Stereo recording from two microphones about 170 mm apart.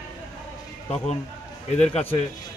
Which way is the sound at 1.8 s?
35° left (ahead or behind).